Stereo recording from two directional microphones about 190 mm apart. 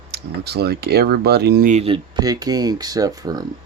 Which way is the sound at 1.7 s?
30° right (ahead or behind).